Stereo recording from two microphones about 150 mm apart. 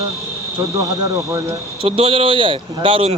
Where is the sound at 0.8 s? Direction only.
20° right (ahead or behind).